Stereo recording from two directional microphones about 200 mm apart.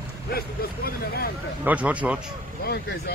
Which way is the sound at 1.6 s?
5° right (ahead or behind).